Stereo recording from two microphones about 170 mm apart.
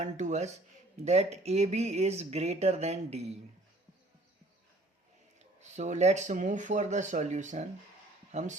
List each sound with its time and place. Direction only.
0.0 s speech: 45° right (ahead or behind)
5.5 s speech: 45° right (ahead or behind)